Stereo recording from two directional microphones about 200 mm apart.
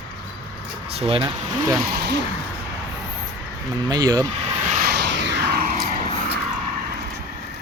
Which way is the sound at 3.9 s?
20° right (ahead or behind).